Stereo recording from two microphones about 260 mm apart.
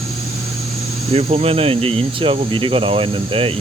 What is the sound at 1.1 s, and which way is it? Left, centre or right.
Speech, right.